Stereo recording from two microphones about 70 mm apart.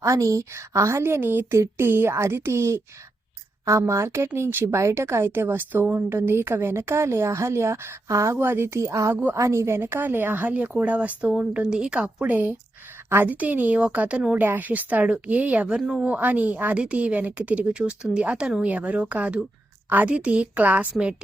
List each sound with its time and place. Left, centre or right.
0.0 s a woman's voice: right
1.5 s a woman's voice: right